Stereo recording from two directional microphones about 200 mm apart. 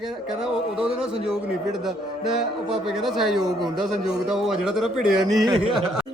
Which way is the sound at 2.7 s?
Centre (ahead or behind).